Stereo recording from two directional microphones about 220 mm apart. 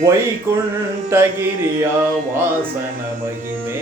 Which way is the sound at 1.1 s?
10° right (ahead or behind).